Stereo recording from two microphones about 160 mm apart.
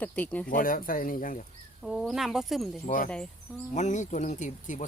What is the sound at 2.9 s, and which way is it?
Speech, 55° left (ahead or behind).